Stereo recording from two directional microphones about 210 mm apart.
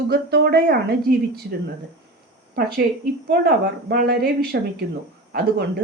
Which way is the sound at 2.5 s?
45° right (ahead or behind).